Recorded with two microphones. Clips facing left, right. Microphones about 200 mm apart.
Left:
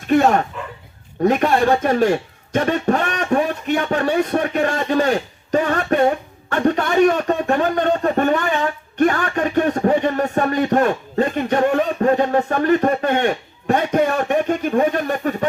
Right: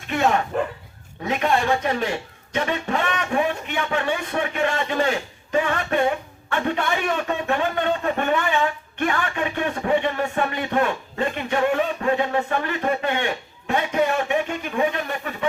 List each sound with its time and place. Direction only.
0.1 s a man's voice: 40° left (ahead or behind)